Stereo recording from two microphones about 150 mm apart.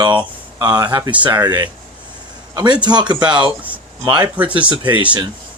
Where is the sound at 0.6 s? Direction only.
30° right (ahead or behind).